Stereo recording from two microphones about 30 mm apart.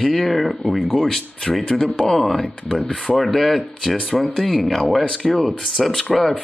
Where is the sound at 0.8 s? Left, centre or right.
Centre.